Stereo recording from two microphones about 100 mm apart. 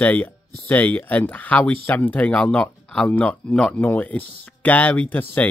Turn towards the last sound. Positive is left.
turn(degrees=15)  # may be behind; listen again after turning